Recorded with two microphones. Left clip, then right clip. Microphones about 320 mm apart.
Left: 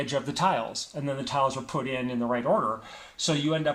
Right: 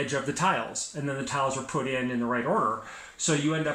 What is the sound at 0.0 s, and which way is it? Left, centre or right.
Speech, centre.